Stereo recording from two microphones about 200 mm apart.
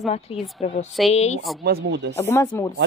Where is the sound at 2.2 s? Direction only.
10° left (ahead or behind).